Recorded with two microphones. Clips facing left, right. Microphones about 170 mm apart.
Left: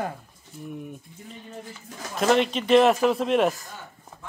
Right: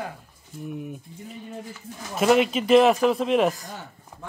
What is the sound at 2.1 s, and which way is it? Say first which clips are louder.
A man's voice: right 2 dB; 5° right (ahead or behind).